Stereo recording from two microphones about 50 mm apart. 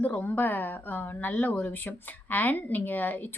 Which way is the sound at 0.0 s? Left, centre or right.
Left.